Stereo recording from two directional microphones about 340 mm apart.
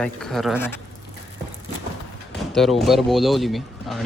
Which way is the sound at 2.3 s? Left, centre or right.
Centre.